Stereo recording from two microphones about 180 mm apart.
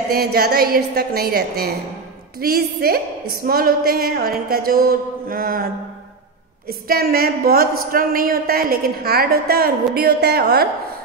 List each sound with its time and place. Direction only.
0.1 s a woman's voice: 60° right (ahead or behind)
6.7 s a woman's voice: 55° right (ahead or behind)